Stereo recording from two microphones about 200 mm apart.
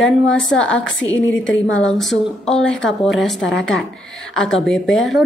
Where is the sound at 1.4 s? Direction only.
5° left (ahead or behind).